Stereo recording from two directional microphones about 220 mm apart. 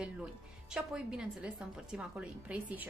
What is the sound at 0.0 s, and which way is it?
A woman's voice, 5° right (ahead or behind).